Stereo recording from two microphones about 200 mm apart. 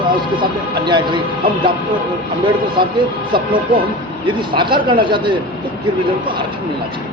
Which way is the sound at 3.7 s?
25° right (ahead or behind).